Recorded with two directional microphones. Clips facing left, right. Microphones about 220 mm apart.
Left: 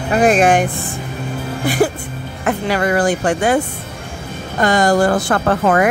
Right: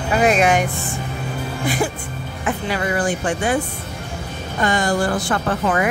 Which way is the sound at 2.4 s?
65° left (ahead or behind).